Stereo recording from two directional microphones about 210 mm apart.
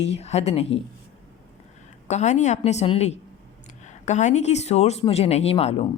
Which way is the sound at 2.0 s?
35° left (ahead or behind).